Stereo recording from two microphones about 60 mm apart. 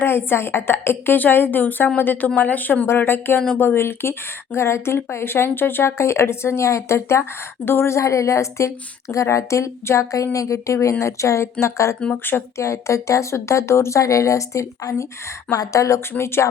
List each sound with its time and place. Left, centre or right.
0.0 s speech: left
2.8 s speech: left
11.9 s speech: centre
12.5 s speech: left
15.5 s speech: left
16.1 s speech: left